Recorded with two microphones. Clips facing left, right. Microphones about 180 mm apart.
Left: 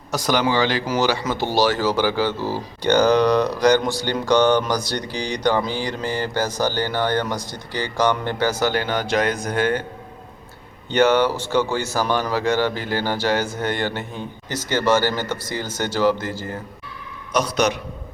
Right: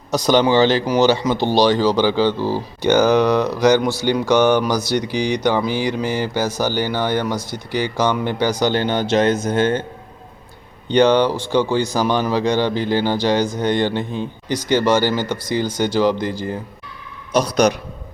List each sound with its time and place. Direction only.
0.3 s speech: 25° right (ahead or behind)
8.7 s speech: 25° right (ahead or behind)
10.8 s speech: 15° right (ahead or behind)
17.3 s a man's voice: 35° right (ahead or behind)